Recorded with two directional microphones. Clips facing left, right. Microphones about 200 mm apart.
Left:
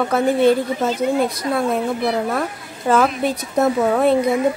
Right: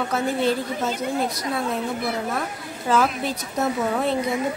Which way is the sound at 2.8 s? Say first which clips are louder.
Left 5 dB; 55° left (ahead or behind).